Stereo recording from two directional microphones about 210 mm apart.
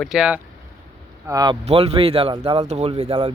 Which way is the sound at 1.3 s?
20° right (ahead or behind).